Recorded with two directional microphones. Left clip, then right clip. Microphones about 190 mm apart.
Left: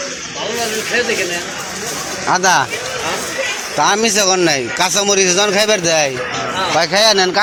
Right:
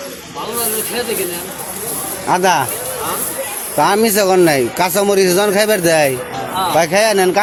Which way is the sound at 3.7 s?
15° right (ahead or behind).